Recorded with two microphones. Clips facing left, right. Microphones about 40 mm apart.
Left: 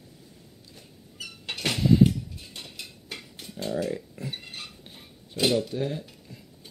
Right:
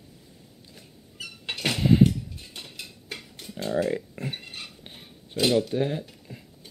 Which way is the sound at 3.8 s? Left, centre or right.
Right.